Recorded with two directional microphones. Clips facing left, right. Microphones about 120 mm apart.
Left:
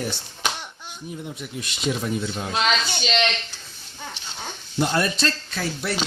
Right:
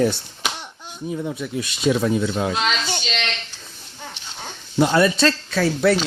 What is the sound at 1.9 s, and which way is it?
Speech, 90° right.